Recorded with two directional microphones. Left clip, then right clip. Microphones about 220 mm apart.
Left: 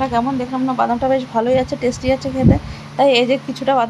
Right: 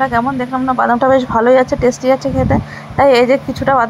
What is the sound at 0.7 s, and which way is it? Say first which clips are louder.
A woman's voice: right 6 dB; 20° right (ahead or behind).